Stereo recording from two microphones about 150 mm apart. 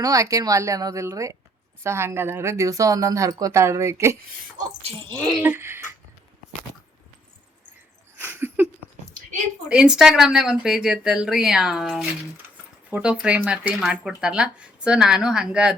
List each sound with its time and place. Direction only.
0.0 s speech: 20° right (ahead or behind)
4.9 s speech: 35° right (ahead or behind)
5.4 s speech: 15° right (ahead or behind)
8.2 s a sound: 15° right (ahead or behind)
9.6 s speech: 5° right (ahead or behind)